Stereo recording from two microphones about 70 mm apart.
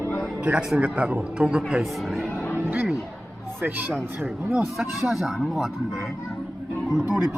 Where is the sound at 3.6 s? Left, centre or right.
Right.